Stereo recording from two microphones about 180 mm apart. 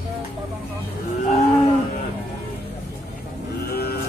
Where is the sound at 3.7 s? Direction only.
60° left (ahead or behind).